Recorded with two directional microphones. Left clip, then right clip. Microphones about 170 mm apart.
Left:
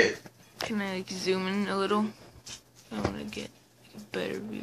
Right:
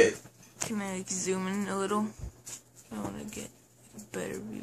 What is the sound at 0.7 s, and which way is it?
Speech, 5° left (ahead or behind).